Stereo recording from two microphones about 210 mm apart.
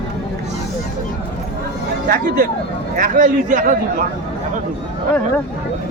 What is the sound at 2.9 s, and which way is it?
Speech, 40° right (ahead or behind).